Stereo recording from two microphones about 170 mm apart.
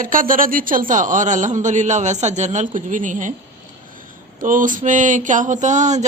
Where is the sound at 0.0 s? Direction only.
55° right (ahead or behind).